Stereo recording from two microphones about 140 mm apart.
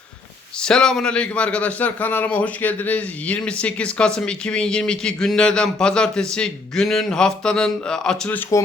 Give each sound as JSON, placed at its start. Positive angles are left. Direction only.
{"t": 0.6, "sound": "a man's voice", "side_deg": 5}